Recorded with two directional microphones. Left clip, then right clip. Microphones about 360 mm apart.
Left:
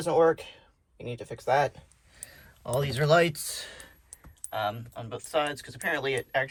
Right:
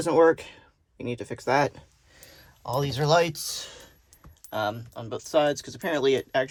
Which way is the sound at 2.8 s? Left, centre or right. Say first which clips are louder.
Right 1 dB; centre.